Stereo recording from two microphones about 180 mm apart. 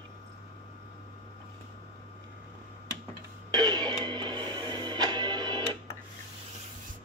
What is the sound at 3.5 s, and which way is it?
Music, 25° right (ahead or behind).